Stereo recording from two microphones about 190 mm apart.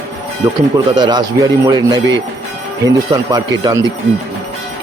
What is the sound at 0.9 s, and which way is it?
A man's voice, 20° right (ahead or behind).